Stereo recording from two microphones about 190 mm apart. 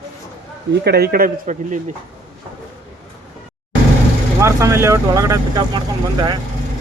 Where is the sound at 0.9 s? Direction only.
55° right (ahead or behind).